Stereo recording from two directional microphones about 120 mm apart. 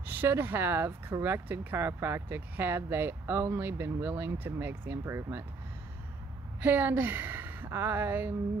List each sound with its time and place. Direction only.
0.0 s speech: 15° right (ahead or behind)
6.6 s speech: 15° right (ahead or behind)